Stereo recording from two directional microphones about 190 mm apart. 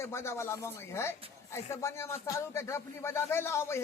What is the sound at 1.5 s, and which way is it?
Speech, 15° left (ahead or behind).